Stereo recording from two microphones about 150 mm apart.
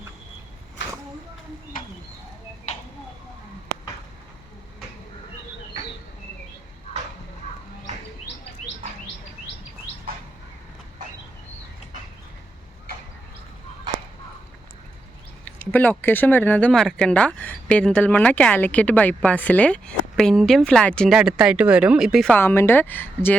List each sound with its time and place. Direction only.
2.7 s a sound: 50° left (ahead or behind)
15.4 s speech: 10° left (ahead or behind)
21.2 s speech: 5° right (ahead or behind)
22.3 s speech: 15° left (ahead or behind)